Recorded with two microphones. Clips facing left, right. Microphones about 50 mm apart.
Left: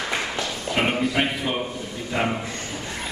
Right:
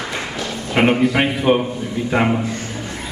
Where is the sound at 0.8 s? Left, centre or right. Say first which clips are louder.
Right 8 dB; right.